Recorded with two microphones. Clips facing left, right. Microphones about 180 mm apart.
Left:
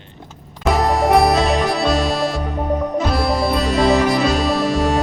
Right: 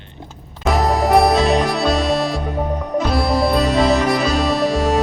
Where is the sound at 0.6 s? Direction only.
Centre (ahead or behind).